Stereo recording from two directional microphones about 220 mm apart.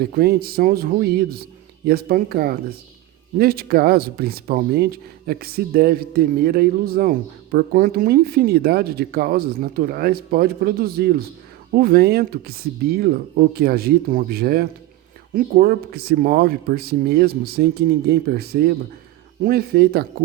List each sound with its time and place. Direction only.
0.0 s speech: 45° right (ahead or behind)